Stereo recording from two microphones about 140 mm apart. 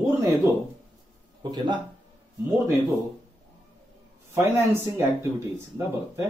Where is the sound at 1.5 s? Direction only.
35° right (ahead or behind).